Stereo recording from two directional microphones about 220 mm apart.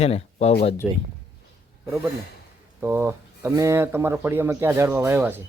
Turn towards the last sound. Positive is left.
turn(degrees=-10)  # may be behind; listen again after turning